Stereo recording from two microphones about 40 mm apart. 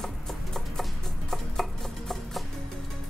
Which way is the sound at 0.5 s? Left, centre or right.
Centre.